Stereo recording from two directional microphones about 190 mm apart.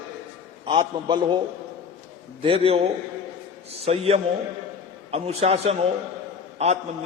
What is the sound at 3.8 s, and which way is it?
A man's voice, 30° right (ahead or behind).